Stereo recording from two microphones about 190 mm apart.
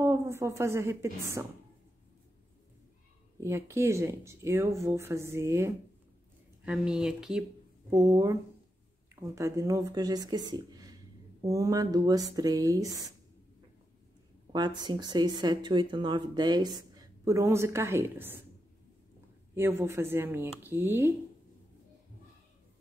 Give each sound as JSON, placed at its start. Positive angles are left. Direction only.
{"t": 0.0, "sound": "a woman's voice", "side_deg": -15}
{"t": 3.3, "sound": "speech", "side_deg": -15}
{"t": 7.9, "sound": "speech", "side_deg": -15}
{"t": 14.5, "sound": "speech", "side_deg": -20}
{"t": 19.5, "sound": "speech", "side_deg": -10}